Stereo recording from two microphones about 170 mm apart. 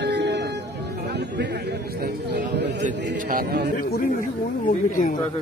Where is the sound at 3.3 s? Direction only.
65° right (ahead or behind).